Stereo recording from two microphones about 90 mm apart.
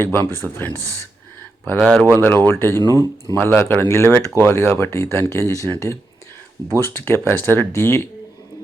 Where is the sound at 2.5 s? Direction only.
30° left (ahead or behind).